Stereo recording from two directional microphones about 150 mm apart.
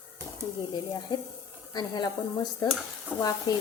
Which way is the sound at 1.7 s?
30° left (ahead or behind).